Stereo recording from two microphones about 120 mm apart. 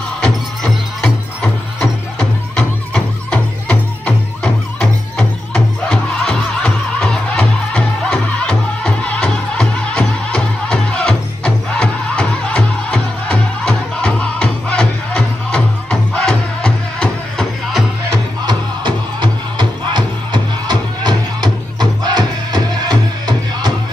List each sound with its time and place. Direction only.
0.2 s music: 5° left (ahead or behind)
18.4 s music: 40° right (ahead or behind)